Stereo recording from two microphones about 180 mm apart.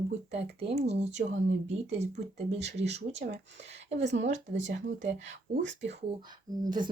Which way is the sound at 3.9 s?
40° right (ahead or behind).